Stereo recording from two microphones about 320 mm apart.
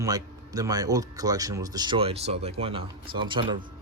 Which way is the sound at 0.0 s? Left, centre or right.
Centre.